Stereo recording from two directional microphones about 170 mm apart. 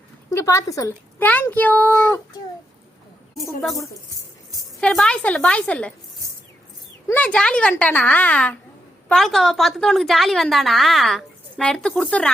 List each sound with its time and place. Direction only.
0.3 s a woman's voice: 20° left (ahead or behind)
4.8 s a woman's voice: 5° left (ahead or behind)
7.1 s a woman's voice: 10° left (ahead or behind)